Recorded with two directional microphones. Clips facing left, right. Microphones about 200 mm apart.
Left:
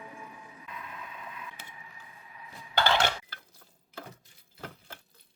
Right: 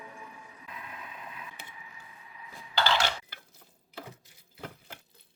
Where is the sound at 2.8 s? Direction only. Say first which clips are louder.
Left 2 dB; 55° left (ahead or behind).